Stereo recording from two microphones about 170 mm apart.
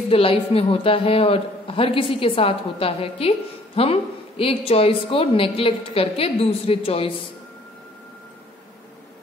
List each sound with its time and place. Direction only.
0.1 s a woman's voice: 35° left (ahead or behind)